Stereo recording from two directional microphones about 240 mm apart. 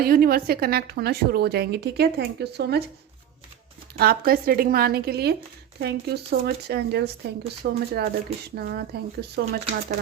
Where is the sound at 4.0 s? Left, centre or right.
Right.